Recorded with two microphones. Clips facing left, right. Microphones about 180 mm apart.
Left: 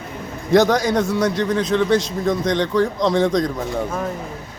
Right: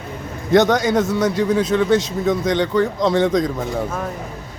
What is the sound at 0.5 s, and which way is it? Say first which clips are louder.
A man's voice: right 1 dB; centre (ahead or behind).